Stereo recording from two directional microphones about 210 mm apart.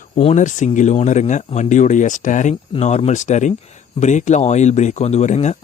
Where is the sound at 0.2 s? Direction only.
35° left (ahead or behind).